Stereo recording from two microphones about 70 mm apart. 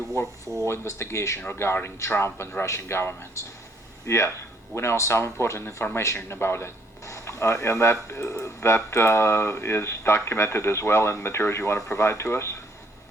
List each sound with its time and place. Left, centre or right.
0.4 s speech: right
0.7 s speech: left
1.4 s speech: left
7.0 s speech: left